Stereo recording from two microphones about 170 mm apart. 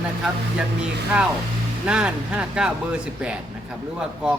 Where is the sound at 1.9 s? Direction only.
5° right (ahead or behind).